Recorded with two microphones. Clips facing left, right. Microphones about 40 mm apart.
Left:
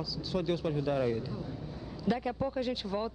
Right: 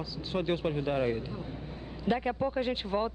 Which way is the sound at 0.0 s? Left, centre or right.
Right.